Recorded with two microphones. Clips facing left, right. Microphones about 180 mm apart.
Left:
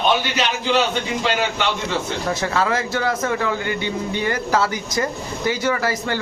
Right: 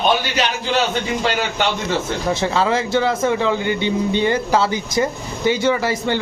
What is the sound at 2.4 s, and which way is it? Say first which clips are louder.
Speech: right 2 dB; 25° right (ahead or behind).